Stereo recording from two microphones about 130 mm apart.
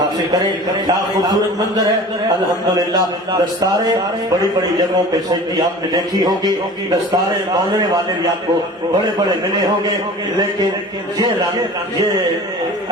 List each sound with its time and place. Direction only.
0.9 s a man's voice: 30° right (ahead or behind)
2.7 s a man's voice: 30° right (ahead or behind)
5.9 s a man's voice: 30° right (ahead or behind)